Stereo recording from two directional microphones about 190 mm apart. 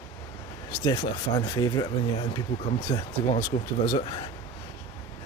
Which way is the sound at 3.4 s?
45° left (ahead or behind).